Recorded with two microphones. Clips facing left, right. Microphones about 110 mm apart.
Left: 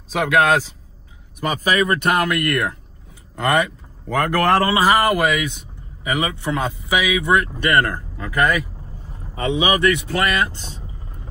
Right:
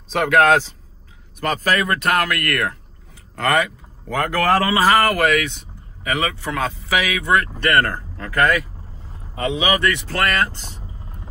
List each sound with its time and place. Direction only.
0.1 s a man's voice: centre (ahead or behind); by 3.7 s 20° left (ahead or behind)
4.1 s speech: 35° left (ahead or behind)
4.7 s speech: 15° left (ahead or behind)